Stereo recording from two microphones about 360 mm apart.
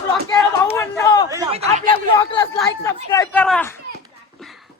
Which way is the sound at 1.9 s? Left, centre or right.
Centre.